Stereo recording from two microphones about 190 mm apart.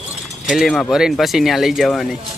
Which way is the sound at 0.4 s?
Centre (ahead or behind).